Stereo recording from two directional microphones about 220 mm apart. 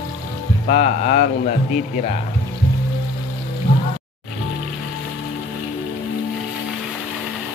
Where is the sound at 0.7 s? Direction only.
35° left (ahead or behind).